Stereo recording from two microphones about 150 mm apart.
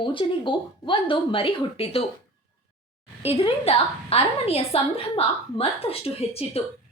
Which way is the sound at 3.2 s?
40° left (ahead or behind).